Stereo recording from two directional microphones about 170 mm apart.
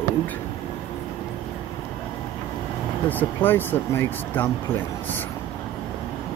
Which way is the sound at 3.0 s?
10° left (ahead or behind).